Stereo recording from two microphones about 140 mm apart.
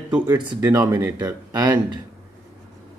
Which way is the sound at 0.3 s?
25° right (ahead or behind).